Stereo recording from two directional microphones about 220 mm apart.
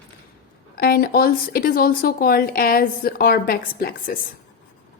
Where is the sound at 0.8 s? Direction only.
45° left (ahead or behind).